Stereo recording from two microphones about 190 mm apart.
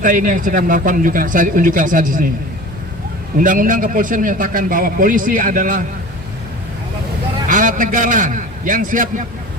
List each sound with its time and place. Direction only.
0.0 s a man's voice: 45° right (ahead or behind)
3.3 s a man's voice: 45° right (ahead or behind)
7.5 s a man's voice: 45° right (ahead or behind)